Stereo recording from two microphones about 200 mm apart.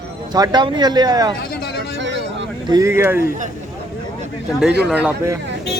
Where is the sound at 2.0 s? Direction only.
65° right (ahead or behind).